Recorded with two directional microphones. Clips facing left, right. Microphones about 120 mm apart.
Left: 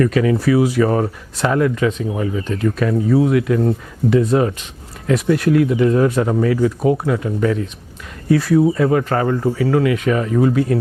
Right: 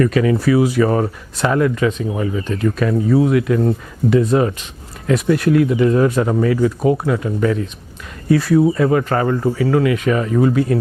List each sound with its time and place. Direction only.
0.0 s speech: 10° right (ahead or behind)